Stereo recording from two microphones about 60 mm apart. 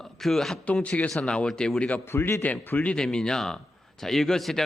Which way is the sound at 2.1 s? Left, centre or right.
Left.